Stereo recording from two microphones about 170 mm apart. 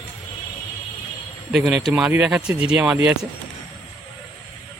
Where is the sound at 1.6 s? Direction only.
5° right (ahead or behind).